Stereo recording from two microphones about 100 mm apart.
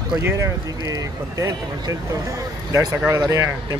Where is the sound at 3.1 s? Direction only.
35° right (ahead or behind).